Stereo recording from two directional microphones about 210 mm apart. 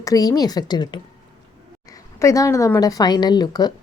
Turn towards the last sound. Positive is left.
turn(degrees=20)  # may be behind; listen again after turning